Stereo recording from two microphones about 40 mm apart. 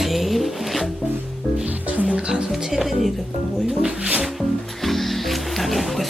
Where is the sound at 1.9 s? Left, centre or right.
Right.